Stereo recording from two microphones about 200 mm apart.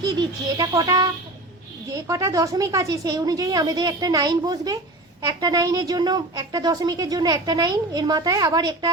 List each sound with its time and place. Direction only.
0.0 s a woman's voice: 20° right (ahead or behind)